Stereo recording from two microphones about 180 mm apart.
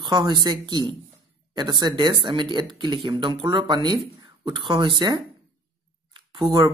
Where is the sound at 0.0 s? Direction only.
25° right (ahead or behind).